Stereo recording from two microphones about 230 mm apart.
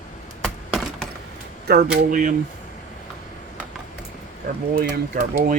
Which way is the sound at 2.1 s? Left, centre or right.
Right.